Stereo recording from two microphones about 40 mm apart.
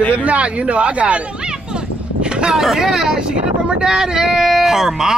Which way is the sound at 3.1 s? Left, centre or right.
Right.